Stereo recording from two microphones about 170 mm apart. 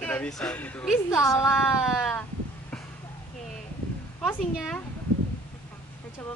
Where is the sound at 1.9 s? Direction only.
Centre (ahead or behind).